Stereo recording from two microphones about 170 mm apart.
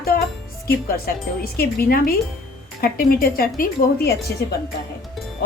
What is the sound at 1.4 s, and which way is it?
A woman's voice, 60° left (ahead or behind).